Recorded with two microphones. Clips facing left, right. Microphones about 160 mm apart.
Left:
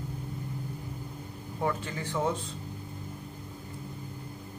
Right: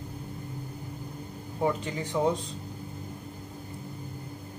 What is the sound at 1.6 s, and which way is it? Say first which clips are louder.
Speech: right 3 dB; 15° right (ahead or behind).